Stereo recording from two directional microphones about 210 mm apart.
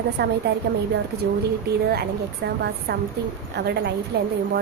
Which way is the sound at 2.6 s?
50° right (ahead or behind).